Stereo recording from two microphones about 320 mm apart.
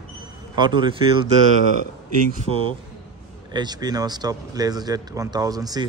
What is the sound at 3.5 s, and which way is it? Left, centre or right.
Speech, centre.